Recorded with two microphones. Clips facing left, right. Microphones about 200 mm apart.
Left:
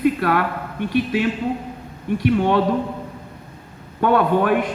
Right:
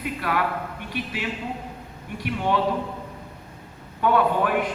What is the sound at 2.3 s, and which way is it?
Speech, 55° left (ahead or behind).